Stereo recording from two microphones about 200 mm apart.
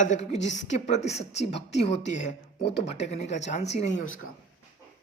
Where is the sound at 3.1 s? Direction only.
35° left (ahead or behind).